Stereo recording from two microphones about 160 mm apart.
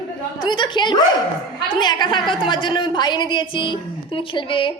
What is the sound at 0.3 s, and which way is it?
A woman's voice, 30° left (ahead or behind).